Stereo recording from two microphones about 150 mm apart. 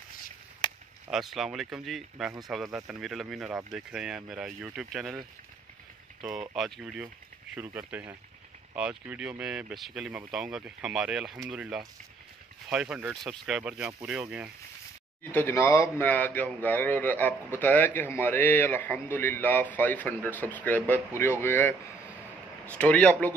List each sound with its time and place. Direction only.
0.6 s chop: 30° left (ahead or behind)
1.1 s speech: centre (ahead or behind)
6.2 s speech: centre (ahead or behind)
15.3 s a man's voice: 15° left (ahead or behind)